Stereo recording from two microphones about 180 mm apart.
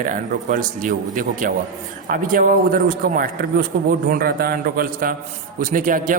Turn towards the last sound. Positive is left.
turn(degrees=-45)  # may be behind; listen again after turning